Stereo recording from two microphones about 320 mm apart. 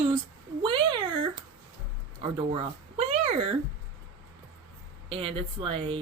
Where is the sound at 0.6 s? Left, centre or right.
Centre.